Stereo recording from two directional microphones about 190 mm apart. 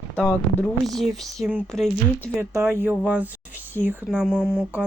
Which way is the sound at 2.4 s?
15° right (ahead or behind).